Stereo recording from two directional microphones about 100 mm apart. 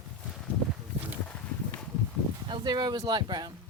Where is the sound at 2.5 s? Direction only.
45° right (ahead or behind).